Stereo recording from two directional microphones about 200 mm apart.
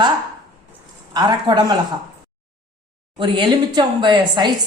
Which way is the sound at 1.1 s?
20° right (ahead or behind).